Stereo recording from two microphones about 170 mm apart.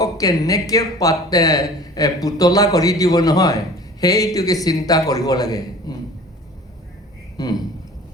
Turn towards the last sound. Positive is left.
turn(degrees=20)  # may be behind; listen again after turning